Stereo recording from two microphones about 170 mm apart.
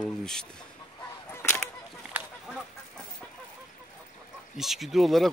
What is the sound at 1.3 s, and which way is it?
Honk, 15° left (ahead or behind).